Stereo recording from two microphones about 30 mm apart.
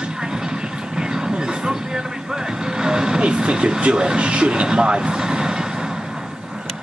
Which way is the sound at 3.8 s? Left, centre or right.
Right.